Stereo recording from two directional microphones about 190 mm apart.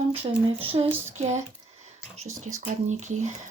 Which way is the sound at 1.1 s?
35° right (ahead or behind).